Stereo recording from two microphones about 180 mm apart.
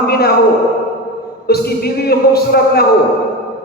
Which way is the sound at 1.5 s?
60° left (ahead or behind).